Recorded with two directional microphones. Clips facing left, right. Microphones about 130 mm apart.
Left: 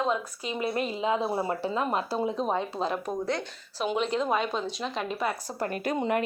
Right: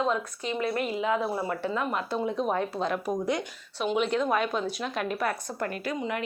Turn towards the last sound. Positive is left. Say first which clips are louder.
# left 4 dB
turn(degrees=45)  # may be behind; listen again after turning